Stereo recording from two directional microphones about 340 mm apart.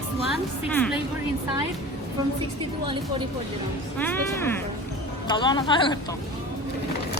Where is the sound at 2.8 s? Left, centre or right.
Centre.